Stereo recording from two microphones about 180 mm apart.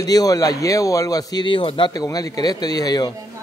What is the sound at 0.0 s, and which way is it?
A man's voice, 20° left (ahead or behind).